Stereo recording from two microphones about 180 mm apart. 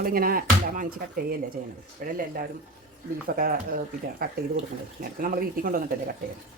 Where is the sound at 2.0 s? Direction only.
55° right (ahead or behind).